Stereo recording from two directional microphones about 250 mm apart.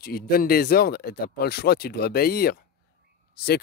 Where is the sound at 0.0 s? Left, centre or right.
Left.